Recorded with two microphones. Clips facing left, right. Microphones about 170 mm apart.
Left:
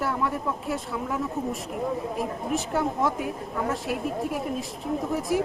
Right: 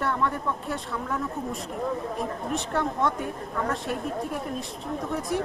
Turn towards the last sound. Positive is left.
turn(degrees=0)  # may be behind; listen again after turning